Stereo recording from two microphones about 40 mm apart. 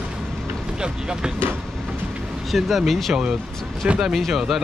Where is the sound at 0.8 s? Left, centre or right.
Centre.